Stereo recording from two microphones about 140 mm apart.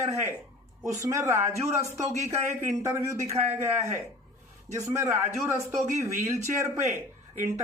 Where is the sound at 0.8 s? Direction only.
20° right (ahead or behind).